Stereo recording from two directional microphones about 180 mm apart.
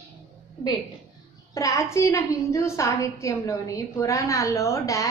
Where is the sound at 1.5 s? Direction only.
15° left (ahead or behind).